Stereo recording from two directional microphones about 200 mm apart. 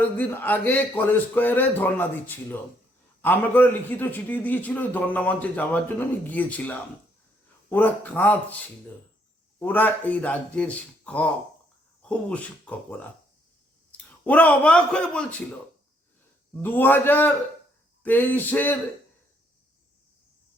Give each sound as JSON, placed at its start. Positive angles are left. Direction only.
{"t": 0.0, "sound": "a man's voice", "side_deg": 10}
{"t": 13.9, "sound": "a man's voice", "side_deg": 5}
{"t": 16.6, "sound": "a man's voice", "side_deg": 10}